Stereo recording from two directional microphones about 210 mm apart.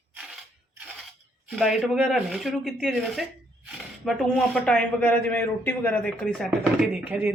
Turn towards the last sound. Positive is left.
turn(degrees=-5)  # may be behind; listen again after turning